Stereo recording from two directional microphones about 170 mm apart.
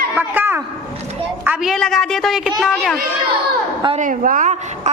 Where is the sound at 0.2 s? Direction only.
10° right (ahead or behind).